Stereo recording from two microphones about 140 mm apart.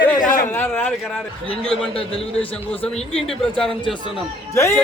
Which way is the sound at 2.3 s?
5° left (ahead or behind).